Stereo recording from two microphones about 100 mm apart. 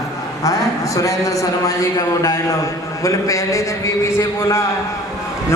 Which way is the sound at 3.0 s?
30° left (ahead or behind).